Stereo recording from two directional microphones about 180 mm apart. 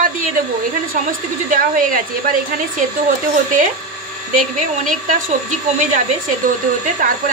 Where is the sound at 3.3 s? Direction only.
45° right (ahead or behind).